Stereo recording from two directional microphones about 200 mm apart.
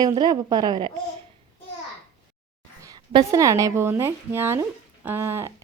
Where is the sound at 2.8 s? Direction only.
20° right (ahead or behind).